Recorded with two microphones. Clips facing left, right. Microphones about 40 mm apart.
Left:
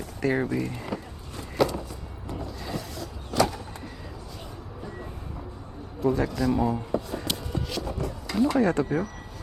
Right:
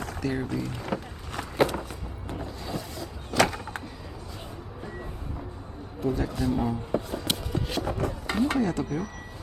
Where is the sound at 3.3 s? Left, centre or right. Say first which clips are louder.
Right 1 dB; right.